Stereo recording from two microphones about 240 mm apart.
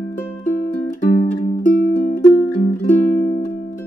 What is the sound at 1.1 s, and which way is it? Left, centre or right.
Music, left.